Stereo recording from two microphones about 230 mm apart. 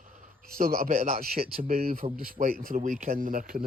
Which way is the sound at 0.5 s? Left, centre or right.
Right.